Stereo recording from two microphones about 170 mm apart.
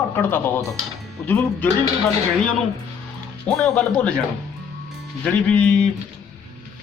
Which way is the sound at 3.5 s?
5° left (ahead or behind).